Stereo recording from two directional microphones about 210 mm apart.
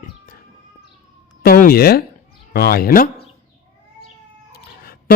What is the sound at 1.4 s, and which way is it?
Speech, 45° left (ahead or behind).